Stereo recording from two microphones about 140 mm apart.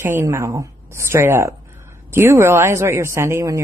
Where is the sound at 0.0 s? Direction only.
20° right (ahead or behind).